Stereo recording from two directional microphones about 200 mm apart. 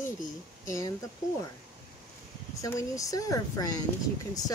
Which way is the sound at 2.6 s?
15° left (ahead or behind).